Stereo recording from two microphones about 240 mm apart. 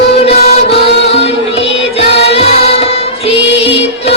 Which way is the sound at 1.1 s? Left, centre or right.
Left.